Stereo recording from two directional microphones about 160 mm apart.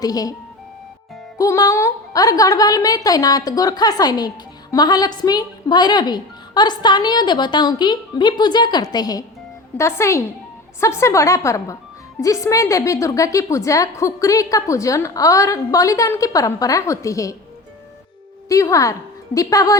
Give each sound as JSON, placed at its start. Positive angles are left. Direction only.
{"t": 0.0, "sound": "a woman's voice", "side_deg": 25}
{"t": 1.4, "sound": "a woman's voice", "side_deg": 20}
{"t": 18.4, "sound": "a woman's voice", "side_deg": 20}